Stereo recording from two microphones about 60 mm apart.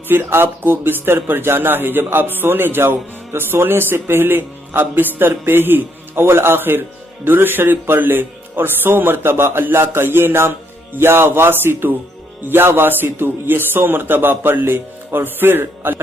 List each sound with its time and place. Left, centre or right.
0.1 s a man's voice: right